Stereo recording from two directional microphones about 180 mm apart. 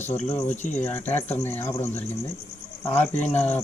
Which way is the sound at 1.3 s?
10° left (ahead or behind).